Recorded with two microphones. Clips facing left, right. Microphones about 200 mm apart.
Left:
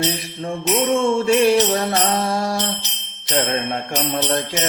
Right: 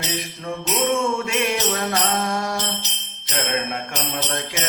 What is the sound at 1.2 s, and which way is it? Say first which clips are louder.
Mantra: left 8 dB; 35° left (ahead or behind).